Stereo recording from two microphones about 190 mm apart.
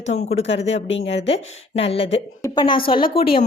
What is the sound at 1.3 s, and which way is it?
A woman's voice, 30° left (ahead or behind).